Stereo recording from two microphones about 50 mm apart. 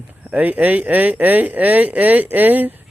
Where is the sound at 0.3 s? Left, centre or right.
Right.